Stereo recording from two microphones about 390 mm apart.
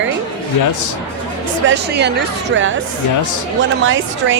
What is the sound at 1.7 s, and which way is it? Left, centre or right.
Speech, right.